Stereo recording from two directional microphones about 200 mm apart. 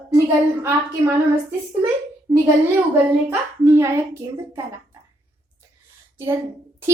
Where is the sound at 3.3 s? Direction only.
15° right (ahead or behind).